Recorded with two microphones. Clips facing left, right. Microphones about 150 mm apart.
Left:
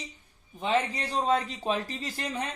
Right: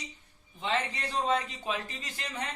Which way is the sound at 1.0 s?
35° left (ahead or behind).